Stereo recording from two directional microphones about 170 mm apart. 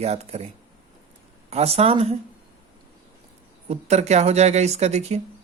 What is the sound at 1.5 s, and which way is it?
Speech, 35° right (ahead or behind).